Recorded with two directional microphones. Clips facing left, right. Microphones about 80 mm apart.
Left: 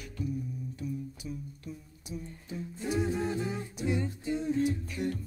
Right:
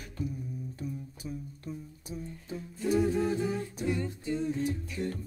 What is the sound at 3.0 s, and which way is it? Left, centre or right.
A capella, left.